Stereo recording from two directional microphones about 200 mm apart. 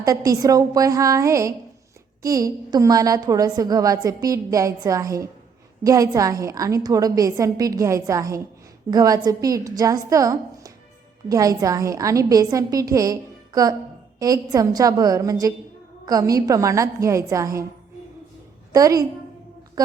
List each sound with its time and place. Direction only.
0.0 s a woman's voice: 15° right (ahead or behind)
18.7 s a woman's voice: 15° right (ahead or behind)